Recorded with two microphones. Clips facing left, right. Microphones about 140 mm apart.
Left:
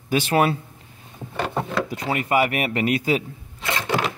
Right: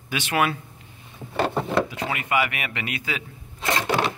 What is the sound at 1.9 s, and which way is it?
Speech, 40° left (ahead or behind).